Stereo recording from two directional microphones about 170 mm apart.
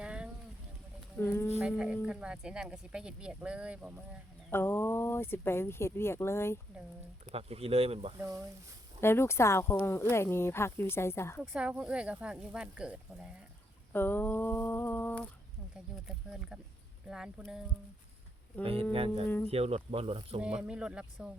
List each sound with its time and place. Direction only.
0.0 s a sound: 5° right (ahead or behind)
1.2 s speech: 15° left (ahead or behind)
1.6 s speech: 5° right (ahead or behind)
4.5 s speech: 15° left (ahead or behind)
7.3 s speech: 35° right (ahead or behind)
8.2 s speech: 15° right (ahead or behind)
9.0 s speech: 15° left (ahead or behind)
11.5 s speech: 5° right (ahead or behind)
13.9 s speech: 10° left (ahead or behind)
16.0 s speech: 5° right (ahead or behind)
18.6 s speech: 35° right (ahead or behind)
20.4 s speech: 5° right (ahead or behind)